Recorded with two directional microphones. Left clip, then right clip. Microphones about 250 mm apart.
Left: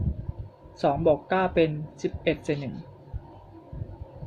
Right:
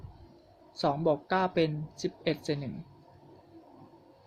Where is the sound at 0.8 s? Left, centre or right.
Right.